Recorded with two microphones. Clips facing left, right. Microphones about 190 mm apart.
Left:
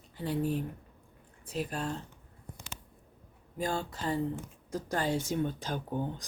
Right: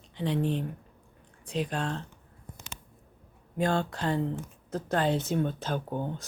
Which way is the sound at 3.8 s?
70° right (ahead or behind).